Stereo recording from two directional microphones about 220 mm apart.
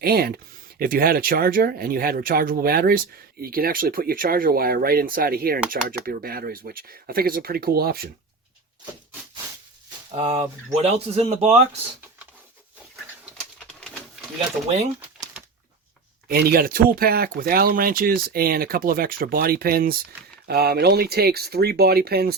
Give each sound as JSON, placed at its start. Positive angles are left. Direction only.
{"t": 0.0, "sound": "speech", "side_deg": -45}
{"t": 10.2, "sound": "speech", "side_deg": -30}
{"t": 13.8, "sound": "pigeon", "side_deg": 5}
{"t": 16.3, "sound": "speech", "side_deg": -45}